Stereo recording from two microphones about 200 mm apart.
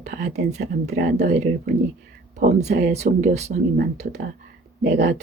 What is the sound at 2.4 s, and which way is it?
Speech, 35° right (ahead or behind).